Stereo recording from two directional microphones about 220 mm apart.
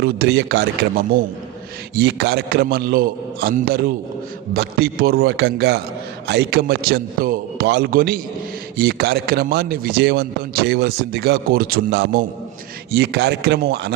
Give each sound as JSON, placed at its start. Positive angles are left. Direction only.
{"t": 0.0, "sound": "a man's voice", "side_deg": -50}